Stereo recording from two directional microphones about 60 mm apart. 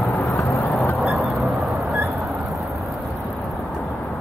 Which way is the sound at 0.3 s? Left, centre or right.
Left.